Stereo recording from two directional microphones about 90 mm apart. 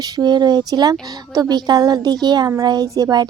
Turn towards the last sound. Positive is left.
turn(degrees=-45)  # may be behind; listen again after turning